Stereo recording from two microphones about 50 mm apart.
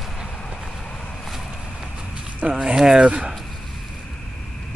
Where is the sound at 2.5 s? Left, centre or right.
Right.